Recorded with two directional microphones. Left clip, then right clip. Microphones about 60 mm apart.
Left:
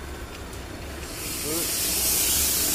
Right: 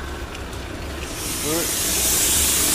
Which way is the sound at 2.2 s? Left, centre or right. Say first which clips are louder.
Right 5 dB; left.